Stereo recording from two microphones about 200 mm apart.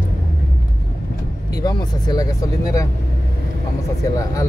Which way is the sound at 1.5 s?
20° left (ahead or behind).